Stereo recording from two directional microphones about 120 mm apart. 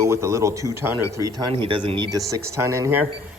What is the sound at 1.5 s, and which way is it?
Speech, 45° right (ahead or behind).